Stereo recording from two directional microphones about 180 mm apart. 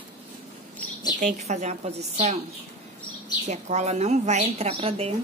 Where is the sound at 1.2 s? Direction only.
40° right (ahead or behind).